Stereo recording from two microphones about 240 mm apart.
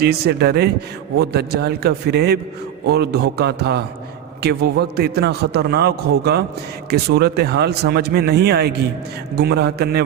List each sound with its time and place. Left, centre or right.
0.0 s a man's voice: right